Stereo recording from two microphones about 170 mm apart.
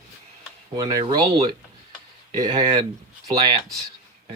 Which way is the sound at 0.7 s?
25° right (ahead or behind).